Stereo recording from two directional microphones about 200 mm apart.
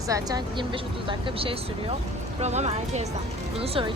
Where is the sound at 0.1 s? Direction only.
20° right (ahead or behind).